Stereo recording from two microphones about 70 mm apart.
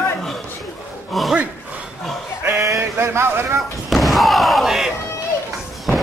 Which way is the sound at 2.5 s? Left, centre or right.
Right.